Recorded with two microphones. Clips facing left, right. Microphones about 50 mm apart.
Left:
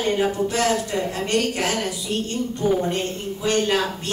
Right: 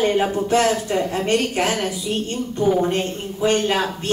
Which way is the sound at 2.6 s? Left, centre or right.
Centre.